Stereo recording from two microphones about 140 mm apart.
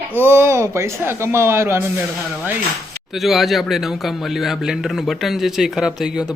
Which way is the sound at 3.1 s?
Centre (ahead or behind).